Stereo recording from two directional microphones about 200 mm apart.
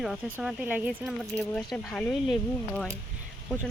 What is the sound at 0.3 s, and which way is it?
Speech, 10° right (ahead or behind).